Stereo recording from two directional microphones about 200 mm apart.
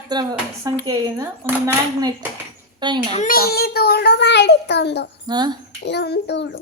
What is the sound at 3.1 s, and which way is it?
A child's voice, 40° left (ahead or behind).